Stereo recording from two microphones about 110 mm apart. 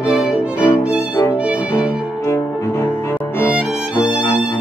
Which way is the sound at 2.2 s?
25° left (ahead or behind).